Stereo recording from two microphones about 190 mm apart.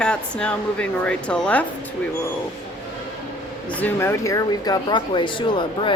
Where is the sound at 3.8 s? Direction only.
15° left (ahead or behind).